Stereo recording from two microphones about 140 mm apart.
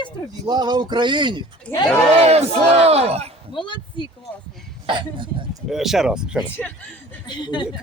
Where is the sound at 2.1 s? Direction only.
45° right (ahead or behind).